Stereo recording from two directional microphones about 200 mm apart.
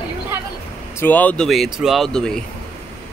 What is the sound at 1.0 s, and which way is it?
Speech, 10° left (ahead or behind).